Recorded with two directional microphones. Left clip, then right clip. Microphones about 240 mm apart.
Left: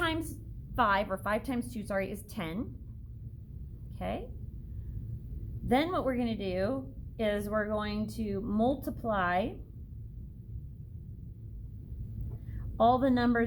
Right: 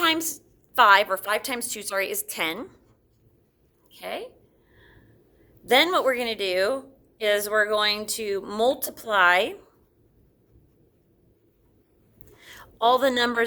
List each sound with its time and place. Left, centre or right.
0.0 s a sound: right
0.8 s a woman's voice: right
4.0 s a woman's voice: right
5.6 s a woman's voice: right
12.5 s a woman's voice: right